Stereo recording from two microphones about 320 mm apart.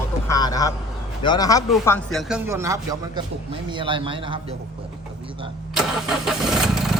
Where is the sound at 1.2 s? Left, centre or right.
Centre.